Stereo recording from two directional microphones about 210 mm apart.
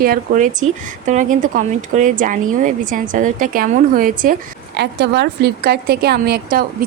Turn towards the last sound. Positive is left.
turn(degrees=-45)  # may be behind; listen again after turning